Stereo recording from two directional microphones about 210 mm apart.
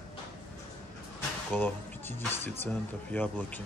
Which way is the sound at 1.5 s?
10° left (ahead or behind).